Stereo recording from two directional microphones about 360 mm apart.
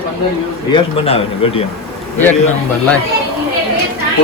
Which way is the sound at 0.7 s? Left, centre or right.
Centre.